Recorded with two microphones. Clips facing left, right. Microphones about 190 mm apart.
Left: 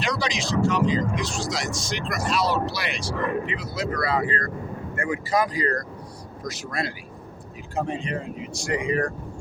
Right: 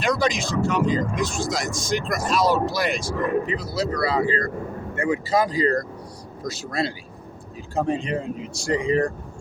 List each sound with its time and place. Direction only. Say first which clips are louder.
0.0 s speech: right 5 dB; 50° right (ahead or behind); by 9.0 s 30° right (ahead or behind)